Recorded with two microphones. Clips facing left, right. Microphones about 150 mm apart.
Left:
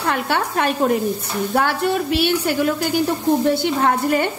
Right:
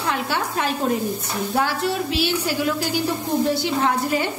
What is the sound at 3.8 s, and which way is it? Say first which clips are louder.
Speech: left 4 dB; 55° left (ahead or behind).